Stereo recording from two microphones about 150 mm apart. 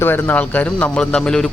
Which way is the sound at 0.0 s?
15° left (ahead or behind).